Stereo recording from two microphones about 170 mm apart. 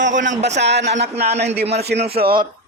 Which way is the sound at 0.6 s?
85° right.